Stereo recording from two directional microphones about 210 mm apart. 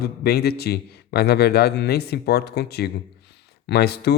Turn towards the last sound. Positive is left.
turn(degrees=50)  # may be behind; listen again after turning